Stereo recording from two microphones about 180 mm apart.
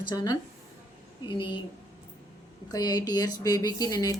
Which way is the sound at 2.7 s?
20° left (ahead or behind).